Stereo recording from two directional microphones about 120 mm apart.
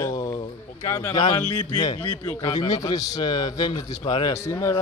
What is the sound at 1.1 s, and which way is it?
A man's voice, 40° left (ahead or behind).